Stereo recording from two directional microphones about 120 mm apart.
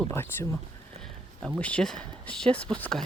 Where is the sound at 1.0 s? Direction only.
5° left (ahead or behind).